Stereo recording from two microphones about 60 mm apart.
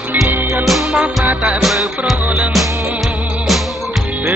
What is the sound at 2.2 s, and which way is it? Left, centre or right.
Music, right.